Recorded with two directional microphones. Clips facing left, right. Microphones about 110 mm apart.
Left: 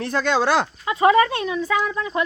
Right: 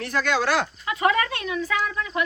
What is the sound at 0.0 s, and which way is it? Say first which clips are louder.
Speech: left 3 dB; 25° left (ahead or behind).